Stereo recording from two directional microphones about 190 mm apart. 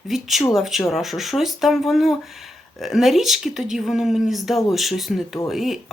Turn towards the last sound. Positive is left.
turn(degrees=0)  # may be behind; listen again after turning